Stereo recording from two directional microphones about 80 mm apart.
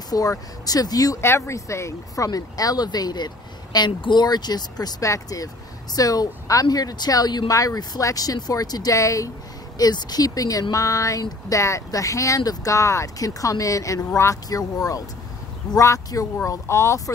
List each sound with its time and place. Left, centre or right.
0.1 s speech: left
1.2 s speech: left
3.7 s speech: left
5.0 s speech: left
9.8 s speech: left